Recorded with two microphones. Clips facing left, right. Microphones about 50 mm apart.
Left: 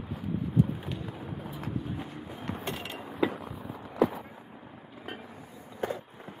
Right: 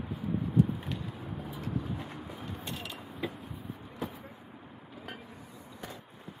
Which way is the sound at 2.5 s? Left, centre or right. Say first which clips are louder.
Left 7 dB; left.